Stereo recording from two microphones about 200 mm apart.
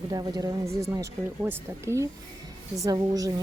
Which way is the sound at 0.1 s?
20° right (ahead or behind).